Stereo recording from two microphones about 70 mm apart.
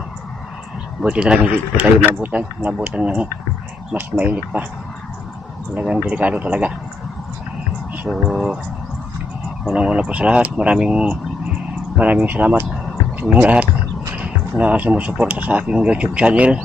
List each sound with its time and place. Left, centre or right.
1.0 s speech: centre
6.0 s speech: centre
8.1 s speech: centre
9.6 s speech: centre